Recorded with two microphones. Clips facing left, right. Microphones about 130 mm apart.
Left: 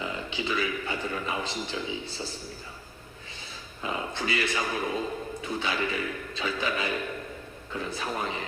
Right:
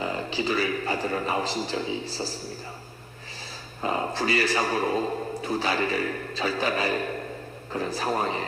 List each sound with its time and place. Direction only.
0.0 s a man's voice: 40° right (ahead or behind)
3.8 s a man's voice: 40° right (ahead or behind)